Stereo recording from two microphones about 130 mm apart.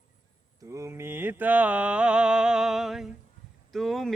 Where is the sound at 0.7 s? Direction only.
20° right (ahead or behind).